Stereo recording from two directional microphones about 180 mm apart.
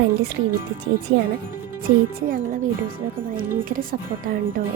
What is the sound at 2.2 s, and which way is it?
Speech, 50° right (ahead or behind).